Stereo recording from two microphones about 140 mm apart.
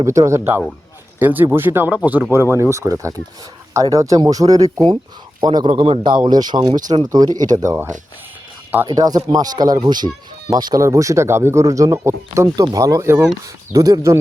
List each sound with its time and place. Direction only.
0.0 s a man's voice: 20° right (ahead or behind)
8.9 s speech: 25° right (ahead or behind)